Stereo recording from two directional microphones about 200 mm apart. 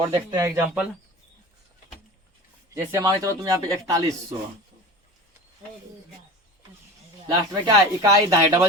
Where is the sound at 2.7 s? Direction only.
10° right (ahead or behind).